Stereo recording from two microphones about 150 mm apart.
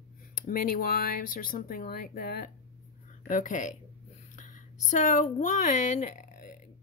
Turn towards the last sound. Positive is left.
turn(degrees=60)  # may be behind; listen again after turning